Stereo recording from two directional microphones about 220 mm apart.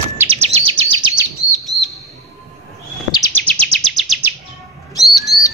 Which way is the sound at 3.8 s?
Centre (ahead or behind).